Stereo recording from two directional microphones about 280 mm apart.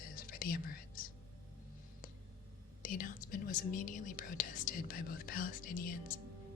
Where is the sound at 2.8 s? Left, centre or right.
Left.